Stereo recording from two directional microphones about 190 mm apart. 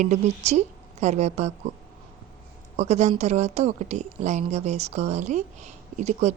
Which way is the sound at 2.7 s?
35° right (ahead or behind).